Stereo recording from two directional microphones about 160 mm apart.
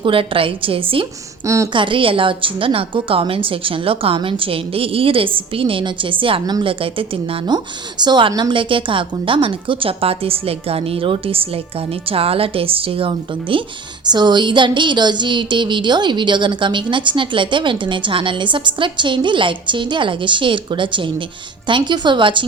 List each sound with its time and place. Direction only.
0.0 s a woman's voice: 35° right (ahead or behind)
1.5 s speech: 20° right (ahead or behind)
1.7 s a woman's voice: 30° right (ahead or behind)